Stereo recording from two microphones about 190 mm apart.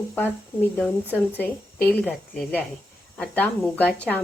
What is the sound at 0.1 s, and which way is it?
Speech, 10° left (ahead or behind).